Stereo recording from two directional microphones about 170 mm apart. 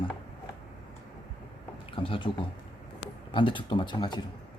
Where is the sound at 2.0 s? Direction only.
30° left (ahead or behind).